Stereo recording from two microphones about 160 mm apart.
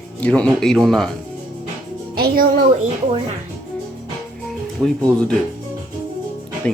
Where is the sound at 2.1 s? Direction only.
70° right (ahead or behind).